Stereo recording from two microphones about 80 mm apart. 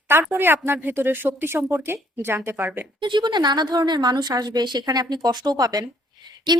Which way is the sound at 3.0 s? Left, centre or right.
Right.